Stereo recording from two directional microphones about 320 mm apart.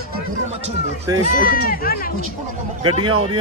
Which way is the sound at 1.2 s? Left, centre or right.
Left.